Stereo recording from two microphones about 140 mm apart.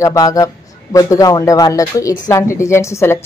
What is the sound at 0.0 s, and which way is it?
Speech, 25° left (ahead or behind).